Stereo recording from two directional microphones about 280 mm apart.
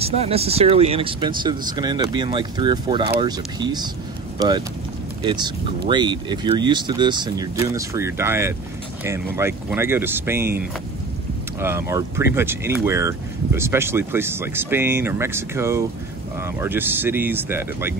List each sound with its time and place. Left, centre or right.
0.0 s speech: right
11.6 s speech: centre